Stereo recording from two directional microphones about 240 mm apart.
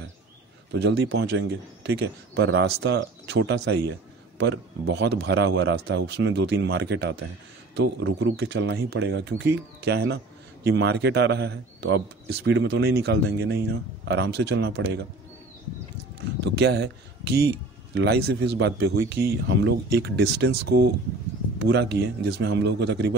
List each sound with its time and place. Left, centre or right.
0.7 s speech: right
16.3 s a man's voice: right